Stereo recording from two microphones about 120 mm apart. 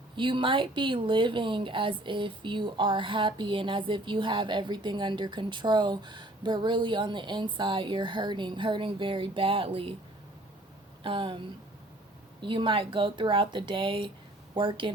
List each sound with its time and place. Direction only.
0.2 s speech: 45° right (ahead or behind)
11.0 s speech: 45° right (ahead or behind)